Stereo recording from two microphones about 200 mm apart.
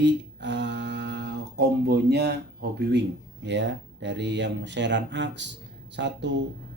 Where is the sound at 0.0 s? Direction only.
60° right (ahead or behind).